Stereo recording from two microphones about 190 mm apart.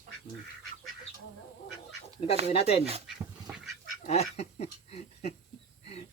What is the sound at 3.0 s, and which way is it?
Dog, centre (ahead or behind).